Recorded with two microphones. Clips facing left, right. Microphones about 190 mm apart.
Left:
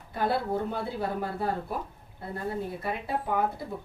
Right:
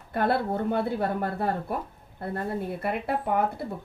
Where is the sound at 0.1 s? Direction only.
60° right (ahead or behind).